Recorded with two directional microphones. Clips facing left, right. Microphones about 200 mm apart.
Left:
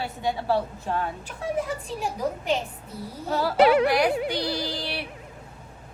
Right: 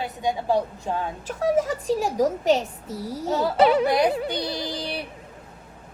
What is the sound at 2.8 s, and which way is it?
Speech, 90° right.